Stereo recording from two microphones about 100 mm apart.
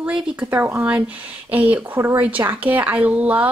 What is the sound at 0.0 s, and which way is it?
A woman's voice, 10° right (ahead or behind).